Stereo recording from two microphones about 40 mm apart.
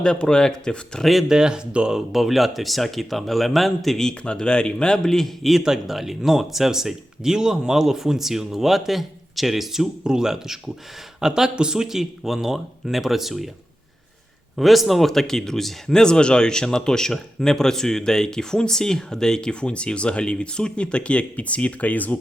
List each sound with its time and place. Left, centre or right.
0.0 s speech: left
1.3 s speech: centre
2.0 s speech: centre
4.2 s speech: left
5.0 s speech: centre
10.0 s speech: centre
14.5 s speech: centre; by 22.2 s left